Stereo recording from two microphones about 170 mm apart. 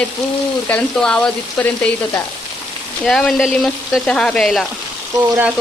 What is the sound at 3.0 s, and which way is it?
Speech, centre (ahead or behind).